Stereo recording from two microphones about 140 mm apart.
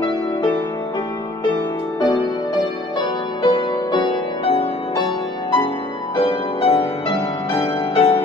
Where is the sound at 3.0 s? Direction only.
35° left (ahead or behind).